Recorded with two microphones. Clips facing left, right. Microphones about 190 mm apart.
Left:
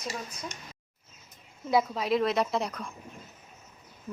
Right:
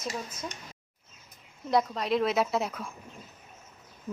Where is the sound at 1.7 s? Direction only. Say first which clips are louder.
Left 1 dB; 5° left (ahead or behind).